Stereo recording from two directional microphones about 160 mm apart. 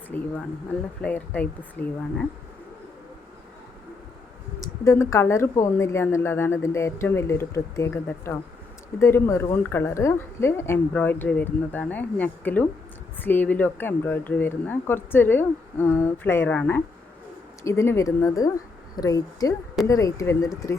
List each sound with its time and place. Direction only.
0.1 s speech: 10° left (ahead or behind)
4.6 s speech: 15° left (ahead or behind)